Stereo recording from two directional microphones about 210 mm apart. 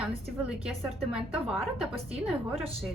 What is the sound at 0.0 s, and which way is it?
A woman's voice, 5° right (ahead or behind).